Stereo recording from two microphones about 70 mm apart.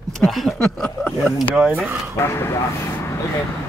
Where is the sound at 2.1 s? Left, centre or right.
Left.